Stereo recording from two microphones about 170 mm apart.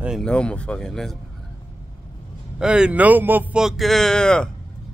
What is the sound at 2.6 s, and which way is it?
Speech, 5° right (ahead or behind).